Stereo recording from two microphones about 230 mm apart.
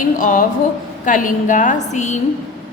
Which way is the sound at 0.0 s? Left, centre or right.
Left.